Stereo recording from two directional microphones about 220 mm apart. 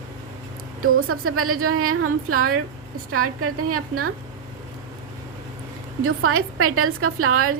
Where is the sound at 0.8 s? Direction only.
75° right (ahead or behind).